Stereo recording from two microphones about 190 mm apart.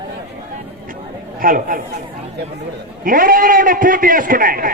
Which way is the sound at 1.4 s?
50° right (ahead or behind).